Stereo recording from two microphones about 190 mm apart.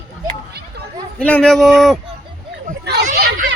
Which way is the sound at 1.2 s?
5° left (ahead or behind).